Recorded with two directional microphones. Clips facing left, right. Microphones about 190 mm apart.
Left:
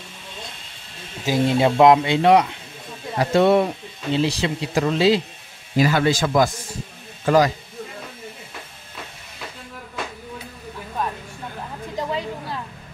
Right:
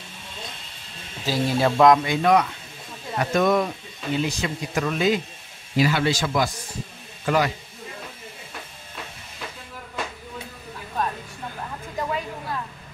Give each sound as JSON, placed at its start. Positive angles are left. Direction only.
{"t": 1.2, "sound": "speech", "side_deg": 20}
{"t": 5.8, "sound": "speech", "side_deg": 45}
{"t": 12.0, "sound": "a sound", "side_deg": 25}